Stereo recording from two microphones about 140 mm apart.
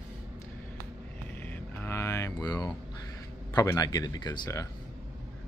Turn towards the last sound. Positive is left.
turn(degrees=25)  # may be behind; listen again after turning